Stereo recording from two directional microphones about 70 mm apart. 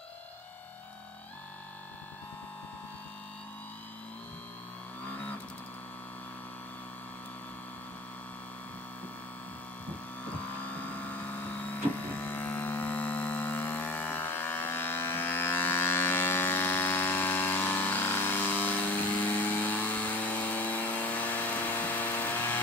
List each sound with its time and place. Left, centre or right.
10.6 s vehicle: left